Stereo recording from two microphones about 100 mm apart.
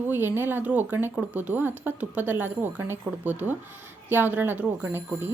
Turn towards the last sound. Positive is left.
turn(degrees=-20)  # may be behind; listen again after turning